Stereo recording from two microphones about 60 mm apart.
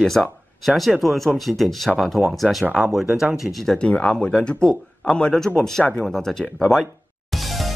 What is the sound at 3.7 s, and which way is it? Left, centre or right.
Speech, centre.